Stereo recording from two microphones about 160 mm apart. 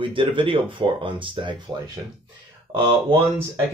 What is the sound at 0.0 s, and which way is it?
A man's voice, 30° right (ahead or behind).